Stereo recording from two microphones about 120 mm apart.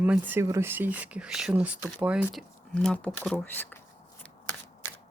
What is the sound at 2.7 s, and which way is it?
Speech, 10° left (ahead or behind).